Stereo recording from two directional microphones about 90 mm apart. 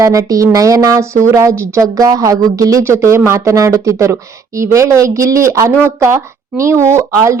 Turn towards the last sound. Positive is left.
turn(degrees=-30)  # may be behind; listen again after turning